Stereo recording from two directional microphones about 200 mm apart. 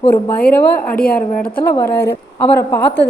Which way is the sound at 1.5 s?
10° left (ahead or behind).